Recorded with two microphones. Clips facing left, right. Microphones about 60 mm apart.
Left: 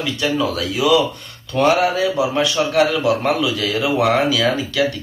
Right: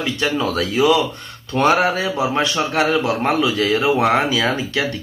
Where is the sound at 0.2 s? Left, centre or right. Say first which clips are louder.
Left 1 dB; right.